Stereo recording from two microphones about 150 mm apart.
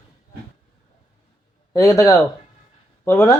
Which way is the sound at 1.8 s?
20° left (ahead or behind).